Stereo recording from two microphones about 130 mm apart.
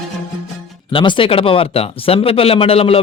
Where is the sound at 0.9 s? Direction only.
40° left (ahead or behind).